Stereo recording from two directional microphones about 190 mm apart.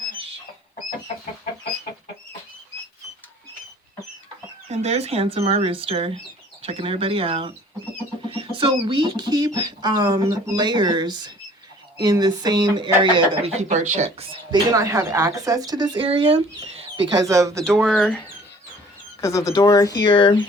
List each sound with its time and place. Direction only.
4.7 s speech: 35° right (ahead or behind)
14.5 s speech: 20° right (ahead or behind)
17.7 s speech: centre (ahead or behind)
19.2 s speech: 15° left (ahead or behind)